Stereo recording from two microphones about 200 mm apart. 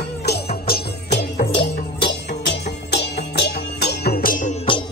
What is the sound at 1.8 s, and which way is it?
Music, 55° left (ahead or behind).